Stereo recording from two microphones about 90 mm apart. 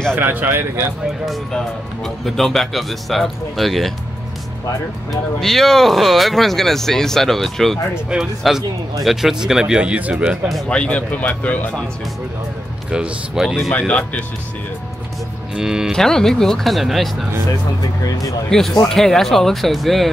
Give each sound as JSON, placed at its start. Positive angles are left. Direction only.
{"t": 0.1, "sound": "speech", "side_deg": -20}
{"t": 1.0, "sound": "speech", "side_deg": 0}
{"t": 5.4, "sound": "speech", "side_deg": 0}
{"t": 7.9, "sound": "speech", "side_deg": -5}
{"t": 10.7, "sound": "speech", "side_deg": 10}
{"t": 12.9, "sound": "speech", "side_deg": -5}
{"t": 13.7, "sound": "speech", "side_deg": 15}
{"t": 15.5, "sound": "speech", "side_deg": -5}
{"t": 15.9, "sound": "speech", "side_deg": 5}
{"t": 18.0, "sound": "speech", "side_deg": 40}
{"t": 18.5, "sound": "speech", "side_deg": 5}